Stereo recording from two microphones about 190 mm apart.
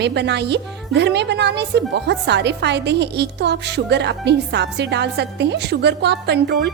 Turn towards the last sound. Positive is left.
turn(degrees=-60)  # may be behind; listen again after turning